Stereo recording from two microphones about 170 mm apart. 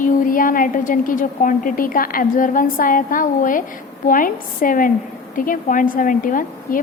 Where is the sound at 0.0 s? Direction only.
55° left (ahead or behind).